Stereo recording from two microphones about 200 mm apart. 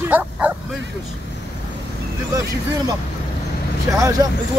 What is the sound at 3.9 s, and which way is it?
Speech, 15° right (ahead or behind).